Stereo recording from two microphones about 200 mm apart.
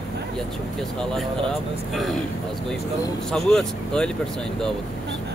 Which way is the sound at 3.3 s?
5° left (ahead or behind).